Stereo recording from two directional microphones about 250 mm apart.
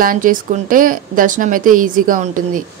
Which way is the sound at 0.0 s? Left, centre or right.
Right.